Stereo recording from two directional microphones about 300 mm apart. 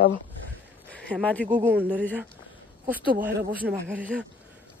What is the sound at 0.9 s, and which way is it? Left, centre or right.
Speech, centre.